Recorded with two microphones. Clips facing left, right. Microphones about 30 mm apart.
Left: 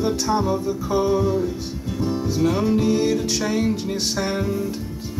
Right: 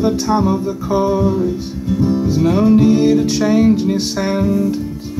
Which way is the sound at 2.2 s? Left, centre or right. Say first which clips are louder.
Right 5 dB; centre.